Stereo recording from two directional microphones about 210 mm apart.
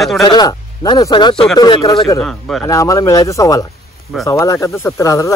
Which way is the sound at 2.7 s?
15° left (ahead or behind).